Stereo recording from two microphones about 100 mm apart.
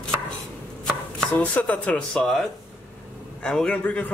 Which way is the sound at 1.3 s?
15° left (ahead or behind).